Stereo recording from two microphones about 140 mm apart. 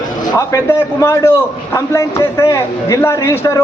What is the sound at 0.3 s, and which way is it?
A man's voice, 20° left (ahead or behind).